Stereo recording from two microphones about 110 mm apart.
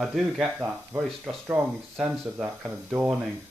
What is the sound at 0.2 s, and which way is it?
Speech, 15° right (ahead or behind).